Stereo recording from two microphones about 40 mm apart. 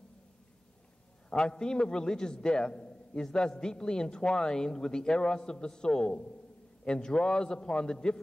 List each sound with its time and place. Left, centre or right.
1.3 s a man's voice: centre
6.8 s a sound: left
7.2 s a man's voice: left